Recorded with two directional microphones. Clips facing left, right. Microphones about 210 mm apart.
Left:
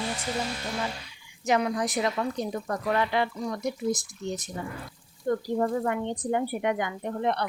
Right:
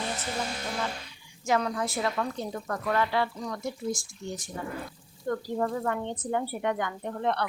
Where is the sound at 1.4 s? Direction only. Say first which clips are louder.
Left 2 dB; 15° left (ahead or behind).